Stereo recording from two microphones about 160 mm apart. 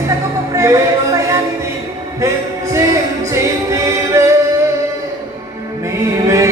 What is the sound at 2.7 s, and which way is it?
Music, 20° right (ahead or behind).